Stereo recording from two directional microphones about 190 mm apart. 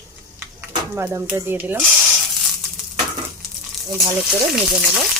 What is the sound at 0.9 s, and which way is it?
Frying, 15° right (ahead or behind).